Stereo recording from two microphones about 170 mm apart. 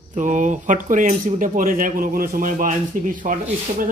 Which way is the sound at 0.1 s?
45° right (ahead or behind).